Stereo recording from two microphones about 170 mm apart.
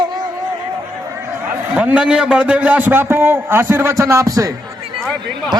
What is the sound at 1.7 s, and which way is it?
A man's voice, 5° right (ahead or behind).